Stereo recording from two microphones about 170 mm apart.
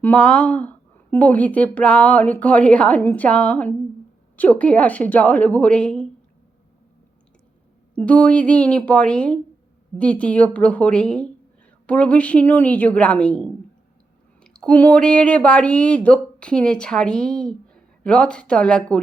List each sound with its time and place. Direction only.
0.0 s a woman's voice: 5° left (ahead or behind)
7.9 s a woman's voice: 5° left (ahead or behind)